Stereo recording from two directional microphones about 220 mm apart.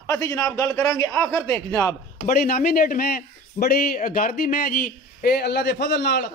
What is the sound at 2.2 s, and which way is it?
A man's voice, 45° left (ahead or behind).